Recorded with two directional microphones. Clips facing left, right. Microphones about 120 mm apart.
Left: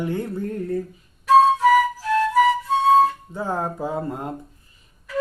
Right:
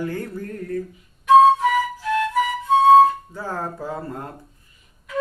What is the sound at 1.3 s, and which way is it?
Music, 35° left (ahead or behind).